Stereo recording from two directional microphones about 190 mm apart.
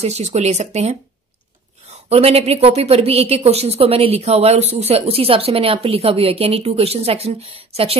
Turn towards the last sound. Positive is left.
turn(degrees=-30)  # may be behind; listen again after turning